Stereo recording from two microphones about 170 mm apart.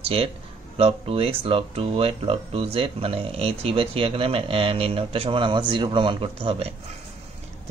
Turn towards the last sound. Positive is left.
turn(degrees=-35)  # may be behind; listen again after turning